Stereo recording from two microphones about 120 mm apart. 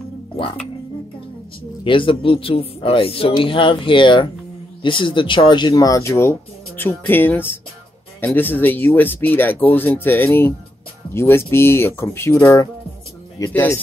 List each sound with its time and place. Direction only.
1.9 s speech: 45° left (ahead or behind); by 13.5 s 30° left (ahead or behind)